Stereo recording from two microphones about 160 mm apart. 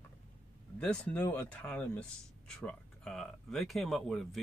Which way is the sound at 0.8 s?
10° left (ahead or behind).